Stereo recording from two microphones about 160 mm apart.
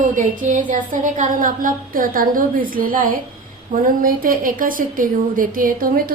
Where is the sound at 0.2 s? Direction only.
55° right (ahead or behind).